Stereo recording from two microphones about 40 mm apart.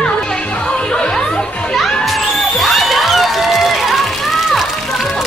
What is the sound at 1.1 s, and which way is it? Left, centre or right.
Music, centre.